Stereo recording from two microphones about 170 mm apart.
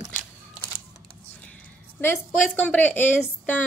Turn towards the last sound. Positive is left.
turn(degrees=10)  # may be behind; listen again after turning